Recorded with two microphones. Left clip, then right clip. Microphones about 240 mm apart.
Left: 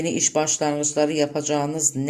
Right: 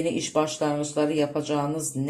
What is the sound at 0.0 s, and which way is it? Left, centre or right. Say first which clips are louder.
Speech: left 2 dB; left.